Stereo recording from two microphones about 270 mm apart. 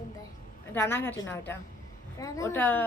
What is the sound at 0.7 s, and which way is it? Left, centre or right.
A woman's voice, centre.